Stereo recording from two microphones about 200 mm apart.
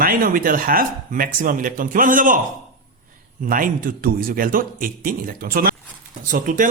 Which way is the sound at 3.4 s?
45° right (ahead or behind).